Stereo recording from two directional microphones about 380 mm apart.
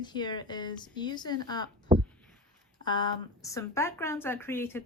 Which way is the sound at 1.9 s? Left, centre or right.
Centre.